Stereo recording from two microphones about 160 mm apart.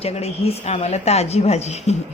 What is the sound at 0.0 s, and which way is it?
A woman's voice, 40° left (ahead or behind).